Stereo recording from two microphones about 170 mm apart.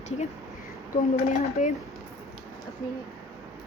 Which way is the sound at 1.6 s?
45° left (ahead or behind).